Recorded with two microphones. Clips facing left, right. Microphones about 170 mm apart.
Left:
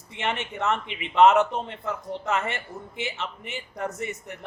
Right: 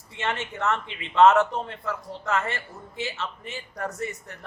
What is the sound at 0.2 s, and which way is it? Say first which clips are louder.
Speech: even; 15° left (ahead or behind).